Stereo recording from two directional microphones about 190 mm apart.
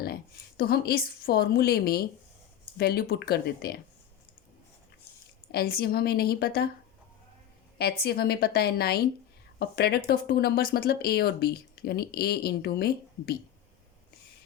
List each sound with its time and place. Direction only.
0.0 s a woman's voice: 55° left (ahead or behind)
5.5 s a woman's voice: 55° left (ahead or behind)
8.0 s speech: 55° left (ahead or behind)